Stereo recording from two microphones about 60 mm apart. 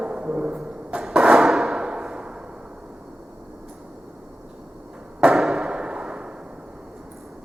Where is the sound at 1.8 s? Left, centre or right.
Centre.